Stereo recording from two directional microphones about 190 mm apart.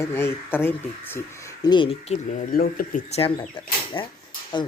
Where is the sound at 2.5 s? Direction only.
50° left (ahead or behind).